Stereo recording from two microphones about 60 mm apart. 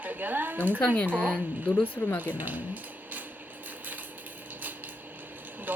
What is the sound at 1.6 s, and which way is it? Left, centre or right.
Speech, left.